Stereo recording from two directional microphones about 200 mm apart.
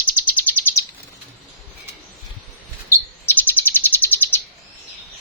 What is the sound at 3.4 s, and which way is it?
Bird, 10° left (ahead or behind).